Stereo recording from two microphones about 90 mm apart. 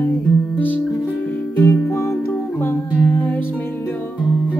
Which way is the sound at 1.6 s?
30° left (ahead or behind).